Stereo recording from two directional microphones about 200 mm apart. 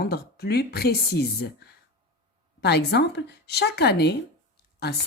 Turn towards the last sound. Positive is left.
turn(degrees=55)  # may be behind; listen again after turning